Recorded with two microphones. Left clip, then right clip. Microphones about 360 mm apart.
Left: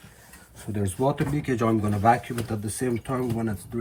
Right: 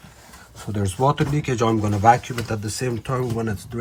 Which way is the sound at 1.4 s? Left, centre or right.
Right.